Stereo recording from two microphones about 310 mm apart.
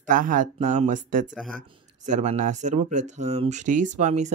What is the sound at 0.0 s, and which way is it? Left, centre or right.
Speech, right.